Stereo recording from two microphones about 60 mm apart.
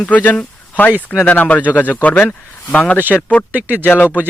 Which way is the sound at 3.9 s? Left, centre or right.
Left.